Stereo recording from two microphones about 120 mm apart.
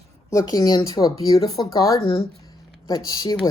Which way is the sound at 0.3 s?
30° left (ahead or behind).